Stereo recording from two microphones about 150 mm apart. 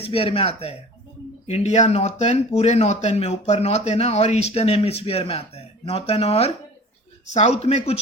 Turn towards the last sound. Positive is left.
turn(degrees=45)  # may be behind; listen again after turning